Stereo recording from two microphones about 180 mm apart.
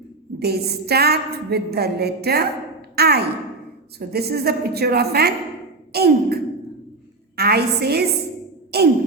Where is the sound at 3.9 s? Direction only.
60° right (ahead or behind).